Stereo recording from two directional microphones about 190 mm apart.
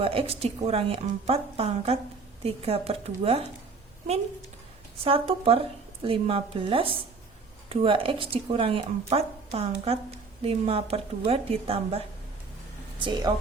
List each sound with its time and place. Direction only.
0.0 s a woman's voice: 30° right (ahead or behind)
5.0 s a woman's voice: 30° right (ahead or behind)